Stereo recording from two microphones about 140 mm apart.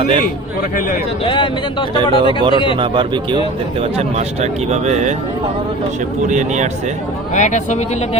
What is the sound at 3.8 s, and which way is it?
Speech, 50° right (ahead or behind).